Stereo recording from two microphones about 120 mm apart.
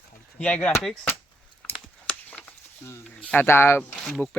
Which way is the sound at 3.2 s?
10° left (ahead or behind).